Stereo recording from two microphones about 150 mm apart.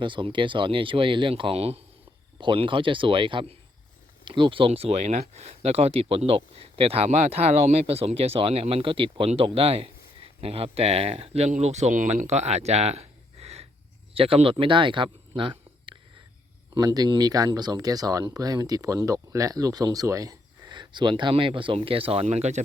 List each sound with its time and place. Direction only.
0.0 s speech: 35° right (ahead or behind)